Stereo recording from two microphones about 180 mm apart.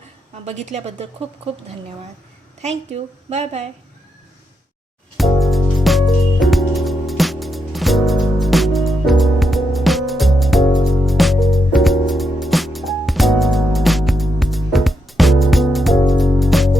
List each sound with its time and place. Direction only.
0.4 s a woman's voice: 40° right (ahead or behind)
2.6 s a woman's voice: 40° right (ahead or behind)
5.1 s music: centre (ahead or behind)